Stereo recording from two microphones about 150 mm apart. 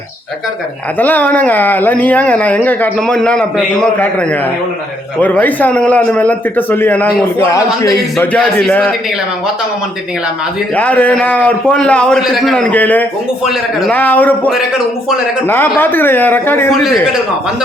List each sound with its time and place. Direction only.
0.9 s a man's voice: 10° left (ahead or behind)
8.3 s speech: 5° left (ahead or behind)
10.8 s speech: 10° left (ahead or behind)